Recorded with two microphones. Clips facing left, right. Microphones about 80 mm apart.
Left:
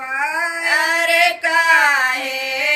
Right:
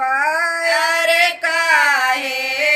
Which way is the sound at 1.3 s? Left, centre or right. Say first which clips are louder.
Left 2 dB; left.